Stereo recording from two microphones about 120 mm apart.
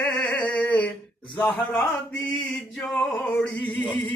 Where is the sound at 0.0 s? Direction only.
10° left (ahead or behind).